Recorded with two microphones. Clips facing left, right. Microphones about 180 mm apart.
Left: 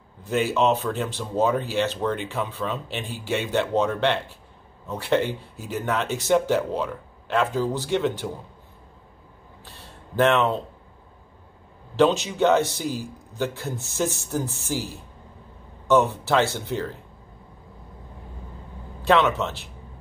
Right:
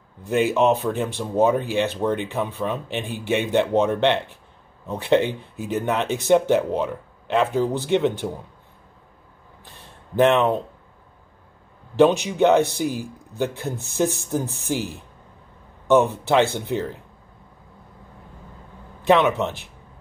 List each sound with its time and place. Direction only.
0.2 s speech: 15° right (ahead or behind)
9.7 s a sound: 15° right (ahead or behind)
12.0 s speech: 15° right (ahead or behind)
19.0 s speech: 15° right (ahead or behind)